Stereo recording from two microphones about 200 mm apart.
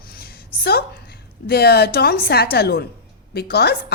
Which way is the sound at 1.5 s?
55° left (ahead or behind).